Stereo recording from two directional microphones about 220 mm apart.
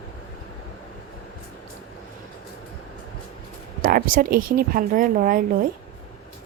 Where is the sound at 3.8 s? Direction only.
40° right (ahead or behind).